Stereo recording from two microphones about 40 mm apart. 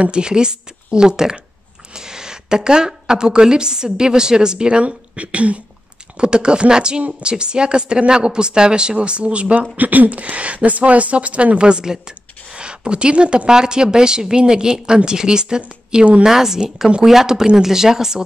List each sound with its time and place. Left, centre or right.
0.0 s a woman's voice: right
6.1 s a woman's voice: right